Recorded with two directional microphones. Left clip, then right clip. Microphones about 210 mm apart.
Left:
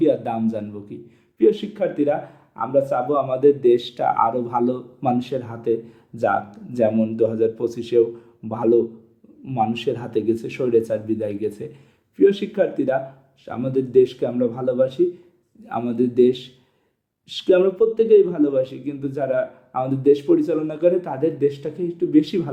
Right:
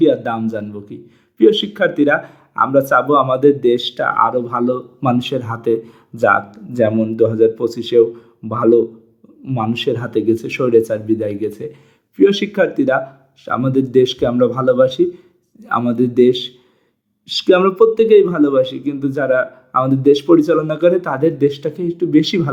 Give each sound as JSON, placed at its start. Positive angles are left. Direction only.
{"t": 0.0, "sound": "speech", "side_deg": -15}